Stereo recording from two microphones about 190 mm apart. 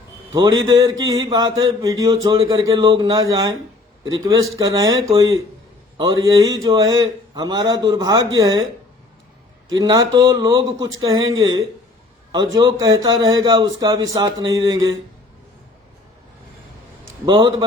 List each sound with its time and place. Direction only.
0.3 s a man's voice: 20° right (ahead or behind)
9.7 s a man's voice: 20° right (ahead or behind)
12.3 s a man's voice: 20° right (ahead or behind)
17.2 s a man's voice: 25° right (ahead or behind)